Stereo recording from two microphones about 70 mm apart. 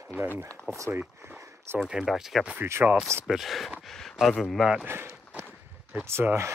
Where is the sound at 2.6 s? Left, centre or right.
Right.